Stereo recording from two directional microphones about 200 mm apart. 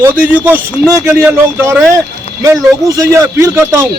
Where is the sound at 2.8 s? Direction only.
15° right (ahead or behind).